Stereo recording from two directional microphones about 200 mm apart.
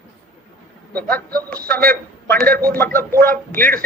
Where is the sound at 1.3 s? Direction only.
5° left (ahead or behind).